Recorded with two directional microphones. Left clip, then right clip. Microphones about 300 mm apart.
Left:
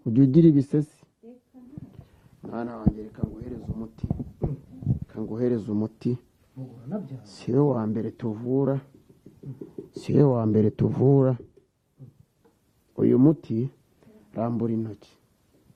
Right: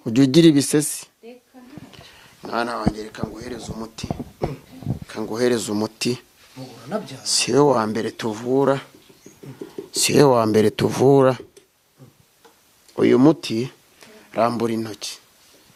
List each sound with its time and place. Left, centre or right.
0.0 s speech: centre
1.7 s a sound: centre
3.0 s speech: centre
3.9 s speech: centre
5.4 s speech: centre
6.6 s a sound: centre
7.3 s speech: centre
9.9 s speech: centre
13.0 s speech: centre